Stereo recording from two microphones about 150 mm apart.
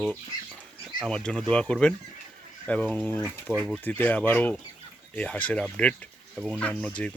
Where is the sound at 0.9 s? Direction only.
5° left (ahead or behind).